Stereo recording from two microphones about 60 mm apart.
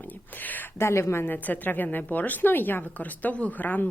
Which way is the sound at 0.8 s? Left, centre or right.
Left.